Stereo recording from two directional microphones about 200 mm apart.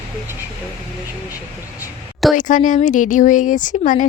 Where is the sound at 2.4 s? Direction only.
40° left (ahead or behind).